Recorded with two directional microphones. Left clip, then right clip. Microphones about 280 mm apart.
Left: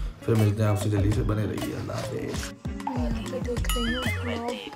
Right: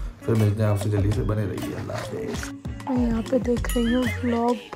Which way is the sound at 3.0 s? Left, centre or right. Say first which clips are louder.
Right 8 dB; centre.